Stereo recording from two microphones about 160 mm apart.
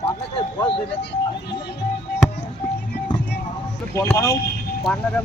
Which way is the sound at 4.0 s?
15° left (ahead or behind).